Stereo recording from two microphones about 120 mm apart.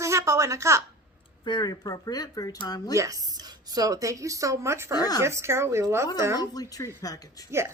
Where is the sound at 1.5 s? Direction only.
35° left (ahead or behind).